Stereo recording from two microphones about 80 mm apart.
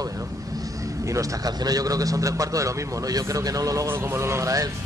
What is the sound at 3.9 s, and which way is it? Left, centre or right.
Speech, right.